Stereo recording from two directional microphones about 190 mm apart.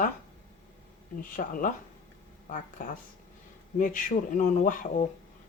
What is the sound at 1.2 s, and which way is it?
Speech, 45° left (ahead or behind).